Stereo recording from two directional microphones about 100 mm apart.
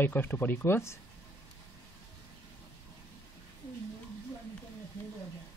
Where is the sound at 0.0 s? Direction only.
20° left (ahead or behind).